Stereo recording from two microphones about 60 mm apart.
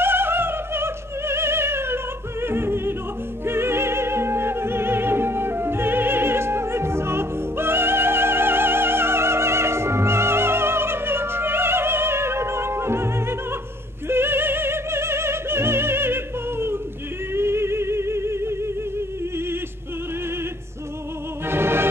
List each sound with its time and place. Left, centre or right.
0.0 s opera: right
17.3 s music: right
21.5 s music: right